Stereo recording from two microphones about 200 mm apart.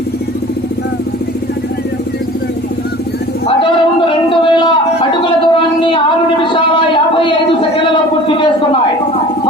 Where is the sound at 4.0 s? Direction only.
25° left (ahead or behind).